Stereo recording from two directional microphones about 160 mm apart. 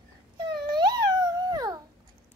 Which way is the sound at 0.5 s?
25° right (ahead or behind).